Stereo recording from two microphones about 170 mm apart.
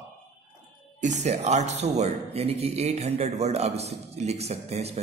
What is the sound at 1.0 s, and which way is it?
Speech, 40° right (ahead or behind).